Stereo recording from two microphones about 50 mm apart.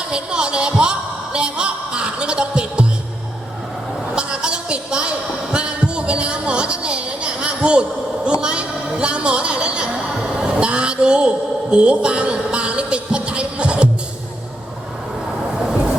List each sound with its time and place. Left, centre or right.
0.1 s a woman's voice: centre
4.1 s a woman's voice: centre